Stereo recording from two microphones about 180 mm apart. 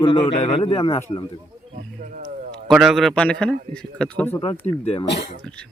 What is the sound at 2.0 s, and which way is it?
Speech, 50° right (ahead or behind).